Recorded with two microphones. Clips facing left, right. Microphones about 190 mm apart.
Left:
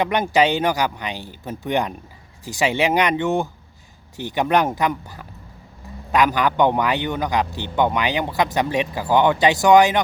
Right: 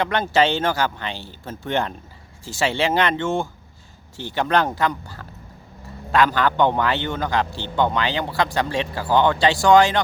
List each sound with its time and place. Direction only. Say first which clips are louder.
0.0 s a man's voice: left 1 dB; 15° left (ahead or behind)